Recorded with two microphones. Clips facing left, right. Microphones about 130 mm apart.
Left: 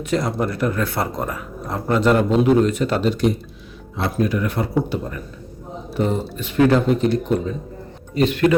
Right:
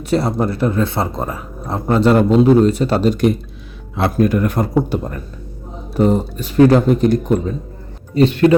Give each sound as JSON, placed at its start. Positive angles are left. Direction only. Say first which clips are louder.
{"t": 0.0, "sound": "speech", "louder": "right 4 dB", "side_deg": -35}
{"t": 3.9, "sound": "speech", "louder": "right 6 dB", "side_deg": -55}
{"t": 8.1, "sound": "speech", "louder": "right 5 dB", "side_deg": -30}